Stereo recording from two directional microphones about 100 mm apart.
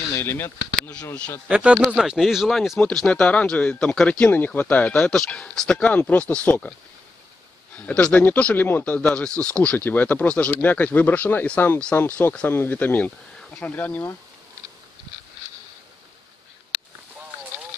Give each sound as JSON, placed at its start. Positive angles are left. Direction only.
{"t": 0.1, "sound": "speech", "side_deg": 25}
{"t": 1.5, "sound": "speech", "side_deg": -10}
{"t": 4.2, "sound": "speech", "side_deg": 15}
{"t": 7.7, "sound": "speech", "side_deg": 15}